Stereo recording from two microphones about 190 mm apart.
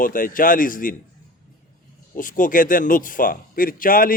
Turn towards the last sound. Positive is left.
turn(degrees=50)  # may be behind; listen again after turning